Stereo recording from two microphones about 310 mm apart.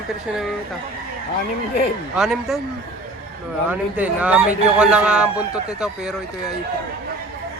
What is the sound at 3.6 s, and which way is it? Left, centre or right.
Speech, centre.